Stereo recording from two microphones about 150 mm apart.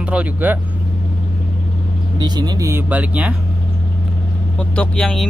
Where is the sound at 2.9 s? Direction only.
10° right (ahead or behind).